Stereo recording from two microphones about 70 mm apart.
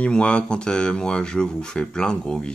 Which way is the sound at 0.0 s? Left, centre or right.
Centre.